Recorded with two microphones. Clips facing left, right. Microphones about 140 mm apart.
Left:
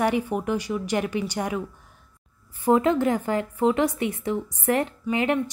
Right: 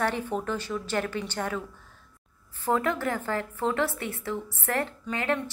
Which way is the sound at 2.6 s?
20° left (ahead or behind).